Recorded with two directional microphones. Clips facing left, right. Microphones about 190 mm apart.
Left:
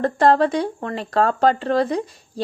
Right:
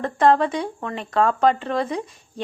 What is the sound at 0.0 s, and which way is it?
Speech, 35° left (ahead or behind).